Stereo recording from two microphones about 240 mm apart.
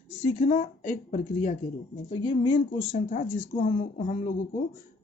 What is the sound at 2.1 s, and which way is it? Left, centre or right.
Speech, left.